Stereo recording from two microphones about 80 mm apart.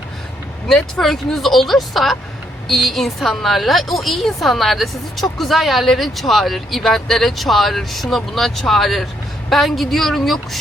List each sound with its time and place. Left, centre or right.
0.7 s speech: centre